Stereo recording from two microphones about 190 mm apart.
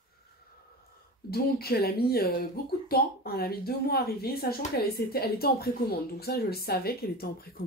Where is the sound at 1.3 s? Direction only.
55° left (ahead or behind).